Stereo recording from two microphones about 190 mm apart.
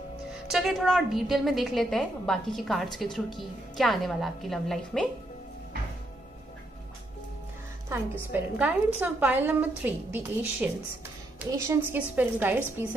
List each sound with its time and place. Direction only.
0.5 s a woman's voice: centre (ahead or behind)
7.9 s a woman's voice: 10° right (ahead or behind)